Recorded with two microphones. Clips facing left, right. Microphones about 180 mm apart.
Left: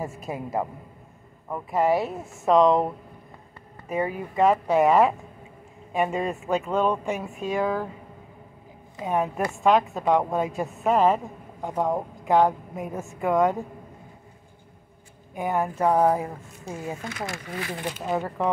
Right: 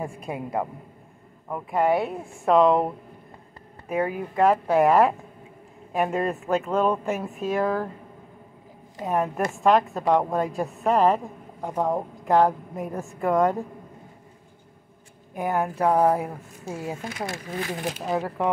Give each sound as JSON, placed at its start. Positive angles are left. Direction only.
{"t": 0.0, "sound": "a woman's voice", "side_deg": 5}
{"t": 3.9, "sound": "a woman's voice", "side_deg": 0}
{"t": 9.0, "sound": "a woman's voice", "side_deg": 0}
{"t": 15.3, "sound": "a woman's voice", "side_deg": 0}